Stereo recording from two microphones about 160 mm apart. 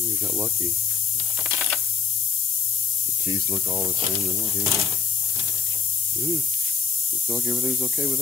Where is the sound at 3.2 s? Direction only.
20° right (ahead or behind).